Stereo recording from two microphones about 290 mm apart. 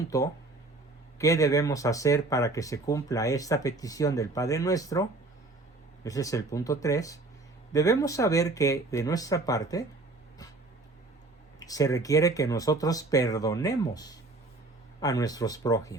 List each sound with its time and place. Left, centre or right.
0.0 s speech: centre
11.6 s speech: centre